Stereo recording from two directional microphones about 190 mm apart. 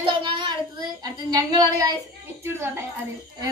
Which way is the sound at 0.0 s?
25° right (ahead or behind).